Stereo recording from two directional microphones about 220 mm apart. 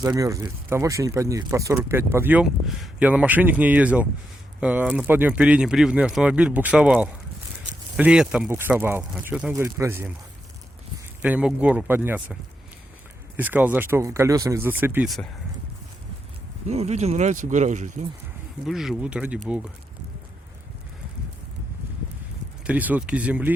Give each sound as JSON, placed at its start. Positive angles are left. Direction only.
{"t": 0.0, "sound": "speech", "side_deg": -15}
{"t": 11.2, "sound": "speech", "side_deg": -5}
{"t": 16.6, "sound": "speech", "side_deg": -30}
{"t": 18.6, "sound": "speech", "side_deg": 0}
{"t": 22.6, "sound": "speech", "side_deg": -5}